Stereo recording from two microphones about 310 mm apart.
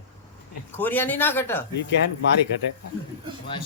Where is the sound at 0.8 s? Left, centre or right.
Centre.